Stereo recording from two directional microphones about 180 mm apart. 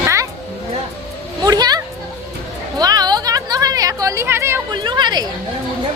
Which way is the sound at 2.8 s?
20° right (ahead or behind).